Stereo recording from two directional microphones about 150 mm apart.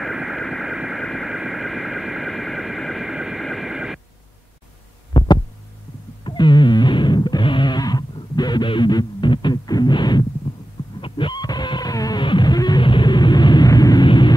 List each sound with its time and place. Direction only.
0.0 s vehicle: centre (ahead or behind)
6.2 s music: 30° left (ahead or behind)